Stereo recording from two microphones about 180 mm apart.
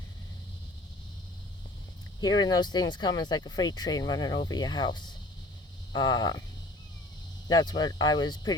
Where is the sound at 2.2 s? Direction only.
20° left (ahead or behind).